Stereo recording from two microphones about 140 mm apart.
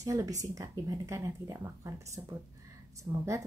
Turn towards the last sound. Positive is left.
turn(degrees=-20)  # may be behind; listen again after turning